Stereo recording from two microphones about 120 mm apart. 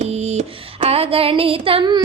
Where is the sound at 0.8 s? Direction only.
55° right (ahead or behind).